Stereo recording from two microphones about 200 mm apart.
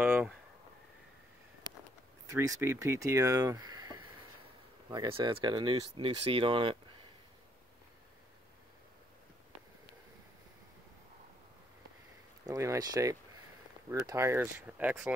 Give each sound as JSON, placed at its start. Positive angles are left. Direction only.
{"t": 0.0, "sound": "a sound", "side_deg": -10}
{"t": 2.2, "sound": "speech", "side_deg": -15}
{"t": 12.4, "sound": "speech", "side_deg": -15}